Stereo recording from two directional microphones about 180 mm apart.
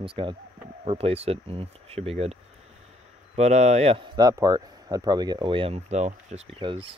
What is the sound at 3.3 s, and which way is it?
A man's voice, 40° right (ahead or behind).